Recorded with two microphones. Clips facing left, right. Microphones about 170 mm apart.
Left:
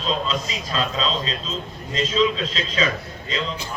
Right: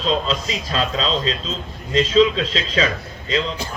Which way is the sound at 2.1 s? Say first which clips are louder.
Right 5 dB; 35° right (ahead or behind).